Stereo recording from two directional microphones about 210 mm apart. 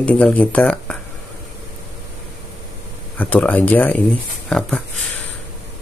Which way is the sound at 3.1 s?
10° left (ahead or behind).